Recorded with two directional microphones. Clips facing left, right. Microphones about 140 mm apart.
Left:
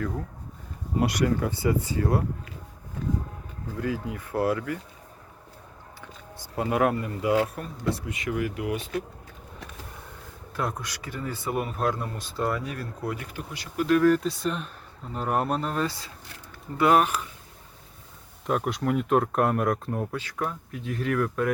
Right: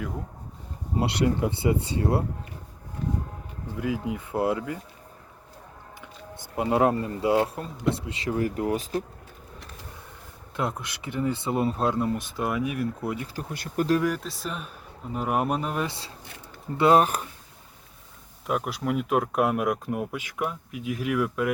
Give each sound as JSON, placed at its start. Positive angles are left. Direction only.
{"t": 0.9, "sound": "speech", "side_deg": -25}
{"t": 3.8, "sound": "speech", "side_deg": -15}
{"t": 6.4, "sound": "speech", "side_deg": -25}
{"t": 10.6, "sound": "speech", "side_deg": -20}
{"t": 13.5, "sound": "speech", "side_deg": -50}
{"t": 14.2, "sound": "speech", "side_deg": 0}
{"t": 15.9, "sound": "speech", "side_deg": -30}
{"t": 18.4, "sound": "speech", "side_deg": -5}